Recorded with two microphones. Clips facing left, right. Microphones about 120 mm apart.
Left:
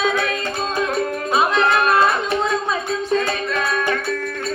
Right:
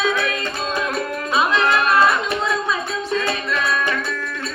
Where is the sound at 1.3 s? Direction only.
45° left (ahead or behind).